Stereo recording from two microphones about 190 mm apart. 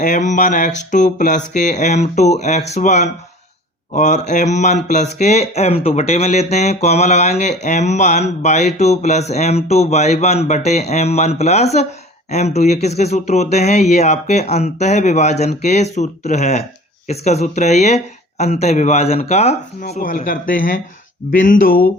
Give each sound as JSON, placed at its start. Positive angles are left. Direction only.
{"t": 0.0, "sound": "speech", "side_deg": 40}
{"t": 19.9, "sound": "speech", "side_deg": 45}